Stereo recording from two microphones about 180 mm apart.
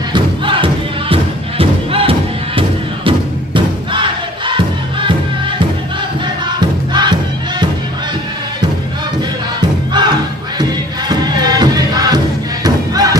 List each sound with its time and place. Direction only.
0.1 s music: 30° right (ahead or behind)
3.1 s crowd: 25° right (ahead or behind)
6.6 s music: 25° right (ahead or behind)
9.6 s music: 25° right (ahead or behind)